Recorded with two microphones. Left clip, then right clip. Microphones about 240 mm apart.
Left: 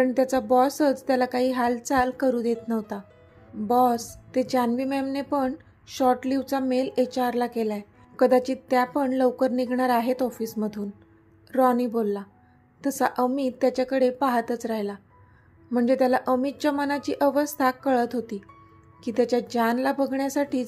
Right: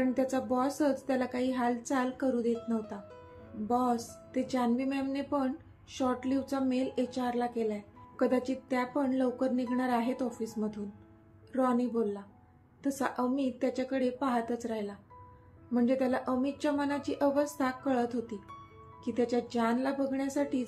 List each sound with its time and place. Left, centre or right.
0.0 s a woman's voice: left